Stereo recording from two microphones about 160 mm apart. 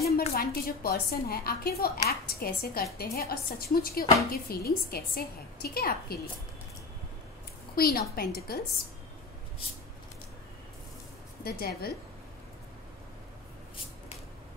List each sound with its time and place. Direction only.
0.0 s a woman's voice: 70° left (ahead or behind)
7.7 s a woman's voice: 70° left (ahead or behind)
11.4 s a woman's voice: 70° left (ahead or behind)